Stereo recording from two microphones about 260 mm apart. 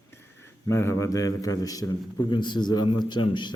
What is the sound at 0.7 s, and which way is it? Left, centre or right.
A man's voice, centre.